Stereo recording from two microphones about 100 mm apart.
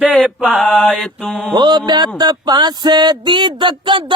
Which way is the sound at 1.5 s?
50° right (ahead or behind).